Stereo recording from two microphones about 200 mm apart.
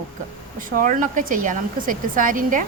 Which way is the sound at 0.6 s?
45° right (ahead or behind).